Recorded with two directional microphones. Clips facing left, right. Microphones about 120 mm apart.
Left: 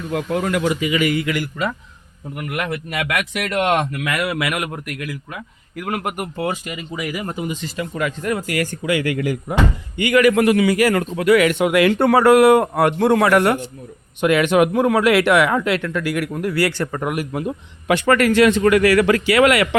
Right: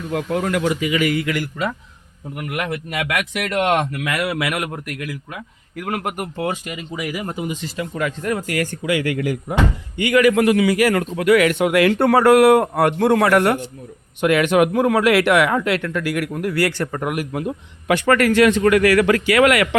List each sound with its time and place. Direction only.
0.1 s speech: 5° left (ahead or behind)
0.5 s a man's voice: 15° left (ahead or behind)
2.4 s speech: 20° right (ahead or behind)
5.7 s speech: 10° left (ahead or behind)
7.1 s speech: 20° right (ahead or behind)
7.6 s speech: centre (ahead or behind)
8.9 s a man's voice: 65° left (ahead or behind)
10.8 s a man's voice: 35° left (ahead or behind)